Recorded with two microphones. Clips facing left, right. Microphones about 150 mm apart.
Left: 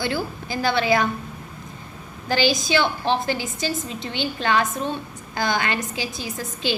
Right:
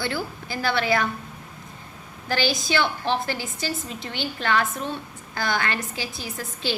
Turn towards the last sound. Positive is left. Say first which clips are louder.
# left 3 dB
turn(degrees=15)  # may be behind; listen again after turning